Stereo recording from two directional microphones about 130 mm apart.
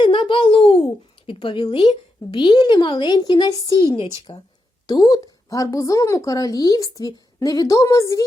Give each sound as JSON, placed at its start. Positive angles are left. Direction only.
{"t": 0.0, "sound": "a child's voice", "side_deg": 40}
{"t": 3.9, "sound": "a woman's voice", "side_deg": 45}
{"t": 4.9, "sound": "a woman's voice", "side_deg": 30}